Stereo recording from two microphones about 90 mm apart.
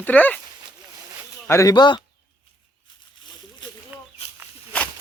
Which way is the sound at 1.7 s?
55° left (ahead or behind).